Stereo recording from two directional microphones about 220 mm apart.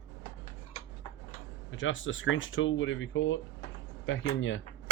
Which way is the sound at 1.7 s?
60° left (ahead or behind).